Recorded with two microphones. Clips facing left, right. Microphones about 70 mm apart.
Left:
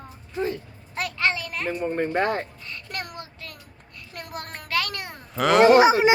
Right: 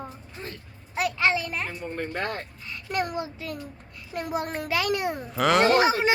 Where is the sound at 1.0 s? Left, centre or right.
Centre.